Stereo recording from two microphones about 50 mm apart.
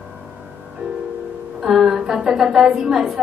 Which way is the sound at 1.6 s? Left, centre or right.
Centre.